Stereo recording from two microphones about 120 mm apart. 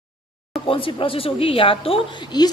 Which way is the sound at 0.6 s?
50° left (ahead or behind).